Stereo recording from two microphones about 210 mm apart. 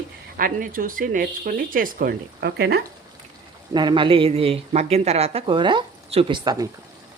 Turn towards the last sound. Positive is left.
turn(degrees=-20)  # may be behind; listen again after turning